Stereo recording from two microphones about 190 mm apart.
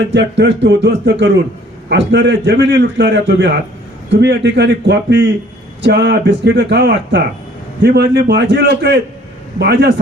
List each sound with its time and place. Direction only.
0.1 s a man's voice: 70° right (ahead or behind)